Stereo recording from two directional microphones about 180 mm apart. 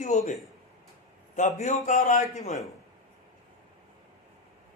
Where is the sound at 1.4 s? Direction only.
40° left (ahead or behind).